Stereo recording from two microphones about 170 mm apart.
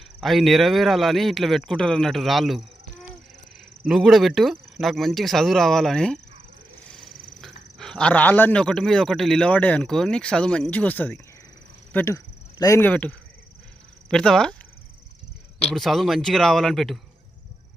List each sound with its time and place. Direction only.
0.2 s speech: centre (ahead or behind)
3.8 s speech: centre (ahead or behind)
15.7 s speech: centre (ahead or behind)